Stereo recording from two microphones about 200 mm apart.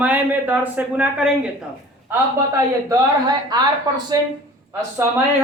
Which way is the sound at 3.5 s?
20° right (ahead or behind).